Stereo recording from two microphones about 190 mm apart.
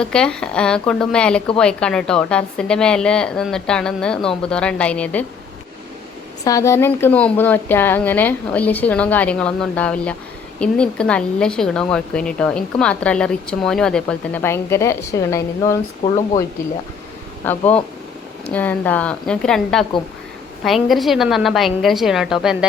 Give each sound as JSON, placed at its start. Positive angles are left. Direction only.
{"t": 0.0, "sound": "a woman's voice", "side_deg": 5}
{"t": 6.4, "sound": "a woman's voice", "side_deg": 15}
{"t": 17.4, "sound": "a woman's voice", "side_deg": 10}